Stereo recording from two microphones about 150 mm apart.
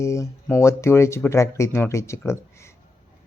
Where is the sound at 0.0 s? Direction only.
20° left (ahead or behind).